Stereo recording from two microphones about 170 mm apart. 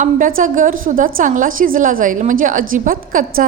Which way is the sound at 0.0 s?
55° right (ahead or behind).